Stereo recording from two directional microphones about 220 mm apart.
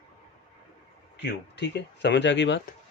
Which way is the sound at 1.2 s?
50° left (ahead or behind).